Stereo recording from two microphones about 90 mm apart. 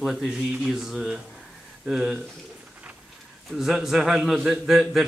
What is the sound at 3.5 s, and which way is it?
A man's voice, 5° right (ahead or behind).